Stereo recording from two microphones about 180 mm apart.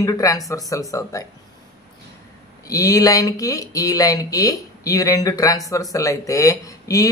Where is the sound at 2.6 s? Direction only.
20° left (ahead or behind).